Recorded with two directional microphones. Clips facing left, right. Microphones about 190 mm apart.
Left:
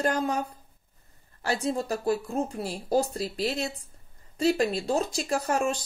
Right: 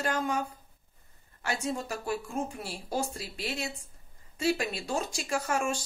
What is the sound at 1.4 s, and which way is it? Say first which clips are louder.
Speech: left 5 dB; 35° left (ahead or behind).